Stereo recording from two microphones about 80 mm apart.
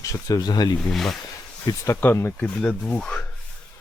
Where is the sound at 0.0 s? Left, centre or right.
Left.